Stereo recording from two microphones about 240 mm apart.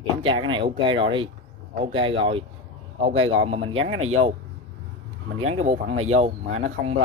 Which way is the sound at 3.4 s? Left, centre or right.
Right.